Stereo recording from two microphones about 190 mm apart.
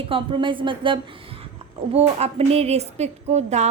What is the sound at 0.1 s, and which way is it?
A woman's voice, 25° right (ahead or behind).